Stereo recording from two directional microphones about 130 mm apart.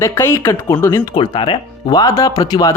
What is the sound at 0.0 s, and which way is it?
A man's voice, 20° left (ahead or behind).